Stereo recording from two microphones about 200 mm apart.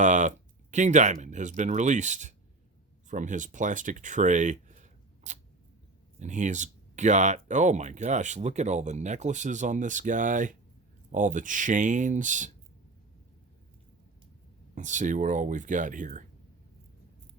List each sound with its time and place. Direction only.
0.0 s speech: 40° right (ahead or behind)
14.8 s speech: 40° right (ahead or behind)